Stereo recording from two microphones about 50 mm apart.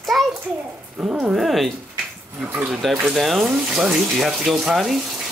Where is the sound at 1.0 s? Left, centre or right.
Right.